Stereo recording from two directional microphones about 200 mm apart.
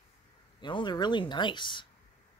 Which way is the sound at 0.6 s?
20° left (ahead or behind).